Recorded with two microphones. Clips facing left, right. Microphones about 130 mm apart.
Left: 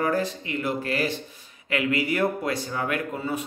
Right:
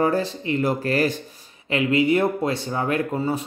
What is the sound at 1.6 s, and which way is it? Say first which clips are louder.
Speech: right 5 dB; 25° right (ahead or behind).